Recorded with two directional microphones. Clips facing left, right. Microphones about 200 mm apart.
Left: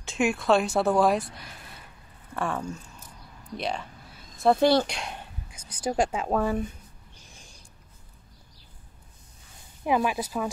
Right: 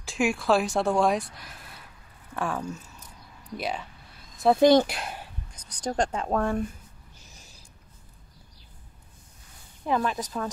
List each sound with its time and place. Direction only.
0.0 s speech: centre (ahead or behind)
3.5 s a sound: 5° right (ahead or behind)
4.6 s speech: 20° right (ahead or behind)
4.8 s speech: 5° right (ahead or behind)
7.3 s a sound: 5° right (ahead or behind)
9.8 s speech: 10° left (ahead or behind)